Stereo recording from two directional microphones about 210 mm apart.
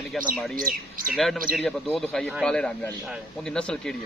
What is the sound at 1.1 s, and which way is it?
Speech, centre (ahead or behind).